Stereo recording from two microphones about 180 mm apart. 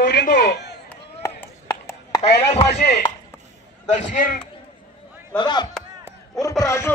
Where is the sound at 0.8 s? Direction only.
10° left (ahead or behind).